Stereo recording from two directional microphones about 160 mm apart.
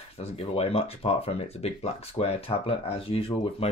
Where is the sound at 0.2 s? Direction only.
40° left (ahead or behind).